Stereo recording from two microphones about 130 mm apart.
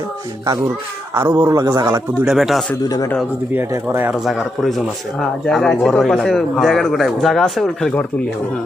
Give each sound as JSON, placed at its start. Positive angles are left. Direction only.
{"t": 1.1, "sound": "a man's voice", "side_deg": -20}
{"t": 2.2, "sound": "speech", "side_deg": 0}
{"t": 3.5, "sound": "speech", "side_deg": -15}
{"t": 4.3, "sound": "speech", "side_deg": 0}